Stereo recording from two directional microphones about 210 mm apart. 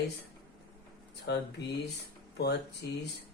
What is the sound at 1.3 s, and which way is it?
Speech, 55° left (ahead or behind).